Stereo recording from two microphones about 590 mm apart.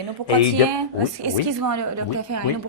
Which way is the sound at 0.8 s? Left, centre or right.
Right.